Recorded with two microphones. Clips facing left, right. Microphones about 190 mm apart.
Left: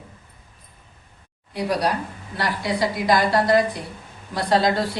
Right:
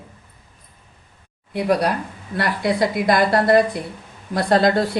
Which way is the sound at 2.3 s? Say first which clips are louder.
Right 4 dB; 55° right (ahead or behind).